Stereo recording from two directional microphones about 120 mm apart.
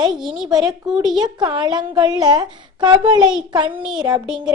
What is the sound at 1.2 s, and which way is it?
Speech, 40° right (ahead or behind).